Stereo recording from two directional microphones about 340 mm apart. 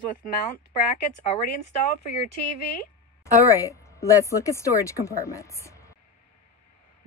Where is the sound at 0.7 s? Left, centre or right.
Centre.